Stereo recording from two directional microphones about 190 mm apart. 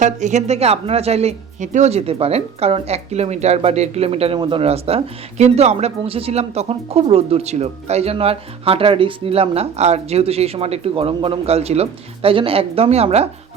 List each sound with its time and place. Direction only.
0.0 s a woman's voice: 40° right (ahead or behind)